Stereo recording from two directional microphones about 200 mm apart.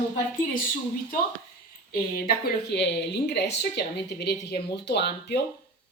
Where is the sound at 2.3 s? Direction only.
55° left (ahead or behind).